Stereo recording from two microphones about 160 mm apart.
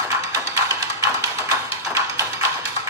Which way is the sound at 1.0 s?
20° right (ahead or behind).